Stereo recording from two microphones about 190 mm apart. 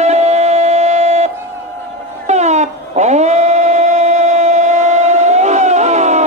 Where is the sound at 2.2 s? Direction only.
35° right (ahead or behind).